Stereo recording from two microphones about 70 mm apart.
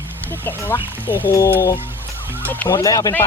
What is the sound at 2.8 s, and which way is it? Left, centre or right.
Speech, left.